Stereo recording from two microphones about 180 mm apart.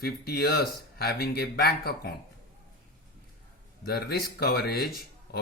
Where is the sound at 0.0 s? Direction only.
60° left (ahead or behind).